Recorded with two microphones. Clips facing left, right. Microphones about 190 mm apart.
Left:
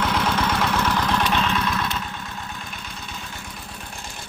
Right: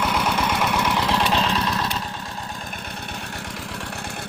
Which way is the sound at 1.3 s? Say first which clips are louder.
Right 1 dB; 35° right (ahead or behind).